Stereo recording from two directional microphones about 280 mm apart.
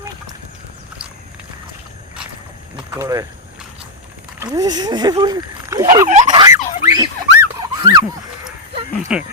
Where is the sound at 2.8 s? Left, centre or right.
Centre.